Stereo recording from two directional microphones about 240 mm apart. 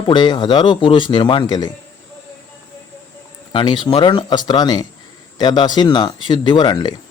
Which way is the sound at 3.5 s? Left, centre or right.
Centre.